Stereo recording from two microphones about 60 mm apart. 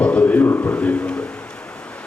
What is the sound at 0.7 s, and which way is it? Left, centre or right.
Speech, centre.